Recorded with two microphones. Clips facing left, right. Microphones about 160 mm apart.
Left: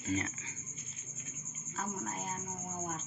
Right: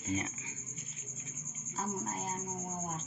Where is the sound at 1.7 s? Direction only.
35° right (ahead or behind).